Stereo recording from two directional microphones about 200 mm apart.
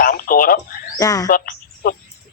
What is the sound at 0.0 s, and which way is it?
Radio, 45° left (ahead or behind).